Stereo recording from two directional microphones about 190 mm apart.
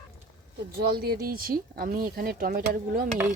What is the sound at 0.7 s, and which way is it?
Speech, 55° right (ahead or behind).